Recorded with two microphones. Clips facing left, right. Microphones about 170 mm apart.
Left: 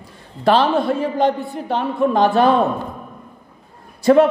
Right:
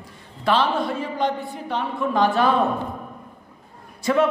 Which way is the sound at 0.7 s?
60° left (ahead or behind).